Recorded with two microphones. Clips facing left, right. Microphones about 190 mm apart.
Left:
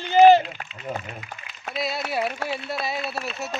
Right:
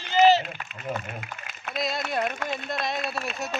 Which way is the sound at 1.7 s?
5° left (ahead or behind).